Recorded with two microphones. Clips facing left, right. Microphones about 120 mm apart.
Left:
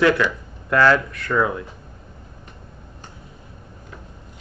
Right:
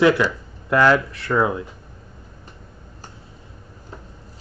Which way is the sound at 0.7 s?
15° right (ahead or behind).